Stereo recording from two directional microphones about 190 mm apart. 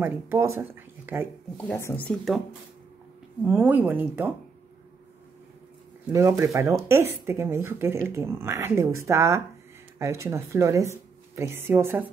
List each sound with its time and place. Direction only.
0.0 s speech: 15° right (ahead or behind)
1.6 s speech: 10° left (ahead or behind)
2.0 s speech: centre (ahead or behind)
3.4 s speech: 10° right (ahead or behind)
6.1 s speech: 15° right (ahead or behind)